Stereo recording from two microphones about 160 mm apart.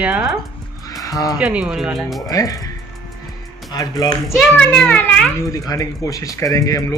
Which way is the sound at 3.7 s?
25° left (ahead or behind).